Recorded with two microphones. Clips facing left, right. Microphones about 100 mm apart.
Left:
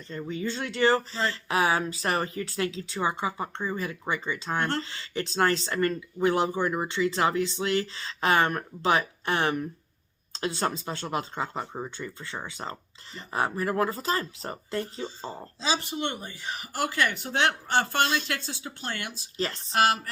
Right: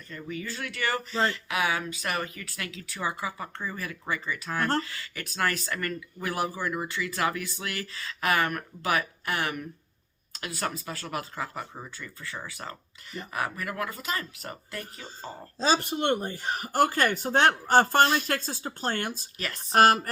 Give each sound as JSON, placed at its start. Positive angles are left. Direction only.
{"t": 0.1, "sound": "speech", "side_deg": 25}
{"t": 15.5, "sound": "speech", "side_deg": -45}
{"t": 19.4, "sound": "speech", "side_deg": 30}
{"t": 19.7, "sound": "speech", "side_deg": -50}